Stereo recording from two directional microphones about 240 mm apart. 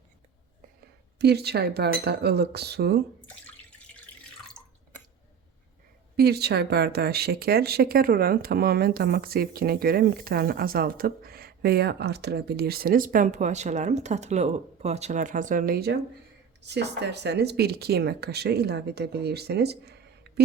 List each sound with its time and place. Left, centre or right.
1.2 s speech: right
6.1 s speech: right